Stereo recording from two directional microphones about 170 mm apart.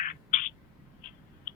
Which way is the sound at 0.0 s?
50° left (ahead or behind).